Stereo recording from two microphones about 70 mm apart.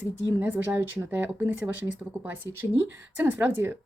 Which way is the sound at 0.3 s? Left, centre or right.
Right.